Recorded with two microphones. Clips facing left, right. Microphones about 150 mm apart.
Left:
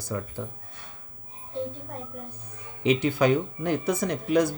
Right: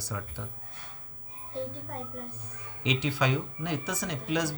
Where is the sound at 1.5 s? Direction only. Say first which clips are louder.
Left 3 dB; 20° left (ahead or behind).